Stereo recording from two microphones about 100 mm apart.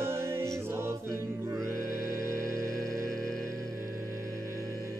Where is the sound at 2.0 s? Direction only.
30° right (ahead or behind).